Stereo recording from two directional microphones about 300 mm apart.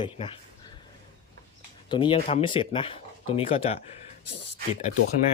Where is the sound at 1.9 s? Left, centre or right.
Centre.